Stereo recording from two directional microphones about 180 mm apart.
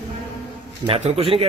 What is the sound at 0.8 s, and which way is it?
Speech, 35° right (ahead or behind).